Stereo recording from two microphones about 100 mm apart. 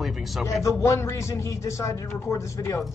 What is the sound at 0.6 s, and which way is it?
A man's voice, 30° left (ahead or behind).